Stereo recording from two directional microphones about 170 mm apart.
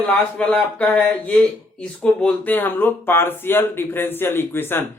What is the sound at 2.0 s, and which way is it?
Speech, 10° left (ahead or behind).